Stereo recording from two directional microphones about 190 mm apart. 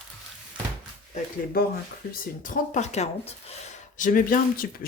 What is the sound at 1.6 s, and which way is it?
Speech, 55° left (ahead or behind).